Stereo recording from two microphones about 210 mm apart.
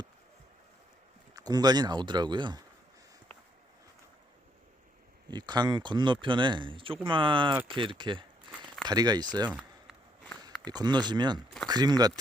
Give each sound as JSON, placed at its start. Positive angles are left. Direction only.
{"t": 1.4, "sound": "speech", "side_deg": -20}
{"t": 5.3, "sound": "speech", "side_deg": -20}
{"t": 8.5, "sound": "a sound", "side_deg": 0}
{"t": 8.9, "sound": "speech", "side_deg": -20}
{"t": 9.5, "sound": "a sound", "side_deg": -5}
{"t": 10.7, "sound": "speech", "side_deg": -20}